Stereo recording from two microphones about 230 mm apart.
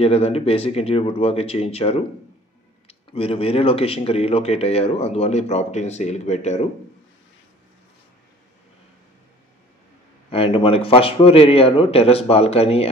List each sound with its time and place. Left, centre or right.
0.0 s speech: left
10.3 s speech: left